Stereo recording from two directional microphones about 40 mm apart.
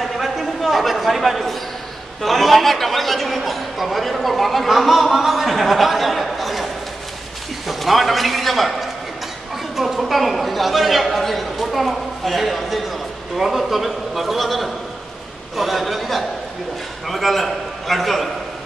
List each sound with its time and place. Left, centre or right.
0.0 s a sound: centre
2.2 s a man's voice: centre
9.8 s speech: centre